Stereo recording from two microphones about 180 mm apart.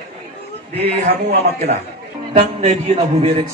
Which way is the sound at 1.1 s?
60° right (ahead or behind).